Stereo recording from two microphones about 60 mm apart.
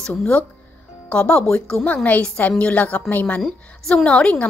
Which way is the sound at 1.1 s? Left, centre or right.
Centre.